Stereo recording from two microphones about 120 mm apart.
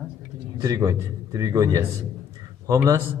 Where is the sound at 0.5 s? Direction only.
30° right (ahead or behind).